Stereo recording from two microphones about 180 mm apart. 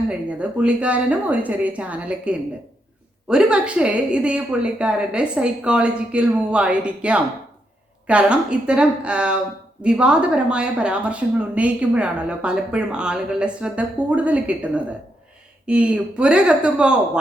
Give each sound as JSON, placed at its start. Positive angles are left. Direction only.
{"t": 0.1, "sound": "a woman's voice", "side_deg": -5}